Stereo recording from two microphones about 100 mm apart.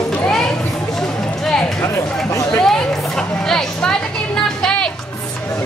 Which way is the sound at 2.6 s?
5° left (ahead or behind).